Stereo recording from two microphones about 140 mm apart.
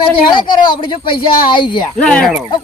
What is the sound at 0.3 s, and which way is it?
Speech, 35° left (ahead or behind).